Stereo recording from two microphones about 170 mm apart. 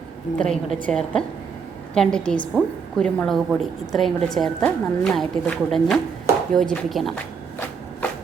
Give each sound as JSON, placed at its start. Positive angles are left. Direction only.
{"t": 0.3, "sound": "a woman's voice", "side_deg": 5}